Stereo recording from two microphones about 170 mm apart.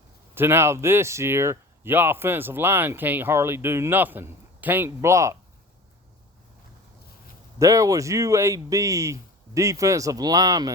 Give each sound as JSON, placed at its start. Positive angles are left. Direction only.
{"t": 0.3, "sound": "speech", "side_deg": -15}
{"t": 7.6, "sound": "speech", "side_deg": -20}